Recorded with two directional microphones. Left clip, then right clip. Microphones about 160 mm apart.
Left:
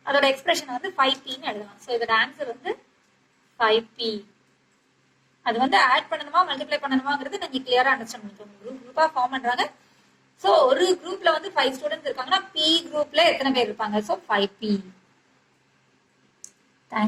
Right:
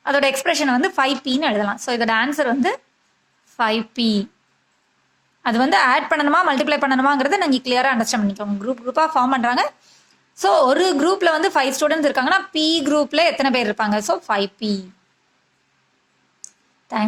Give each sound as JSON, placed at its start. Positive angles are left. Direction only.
{"t": 0.0, "sound": "a woman's voice", "side_deg": -45}
{"t": 5.4, "sound": "a woman's voice", "side_deg": -50}